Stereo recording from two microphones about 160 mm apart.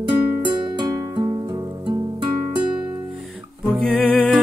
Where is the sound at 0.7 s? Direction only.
30° right (ahead or behind).